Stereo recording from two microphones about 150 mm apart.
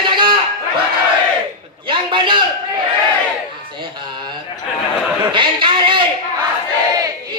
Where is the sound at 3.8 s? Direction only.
30° right (ahead or behind).